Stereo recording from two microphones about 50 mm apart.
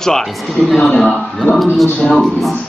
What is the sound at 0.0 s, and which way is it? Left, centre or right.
Speech, centre.